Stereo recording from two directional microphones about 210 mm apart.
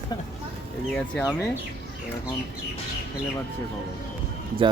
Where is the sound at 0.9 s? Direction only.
5° left (ahead or behind).